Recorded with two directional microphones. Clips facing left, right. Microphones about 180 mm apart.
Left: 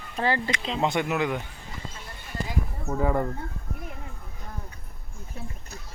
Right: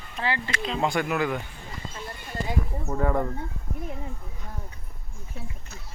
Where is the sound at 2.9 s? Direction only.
5° left (ahead or behind).